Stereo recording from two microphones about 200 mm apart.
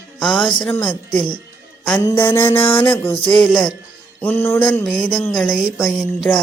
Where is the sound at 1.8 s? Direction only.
5° left (ahead or behind).